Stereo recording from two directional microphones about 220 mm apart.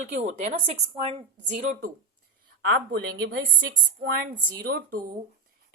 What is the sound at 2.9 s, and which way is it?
A woman's voice, 45° right (ahead or behind).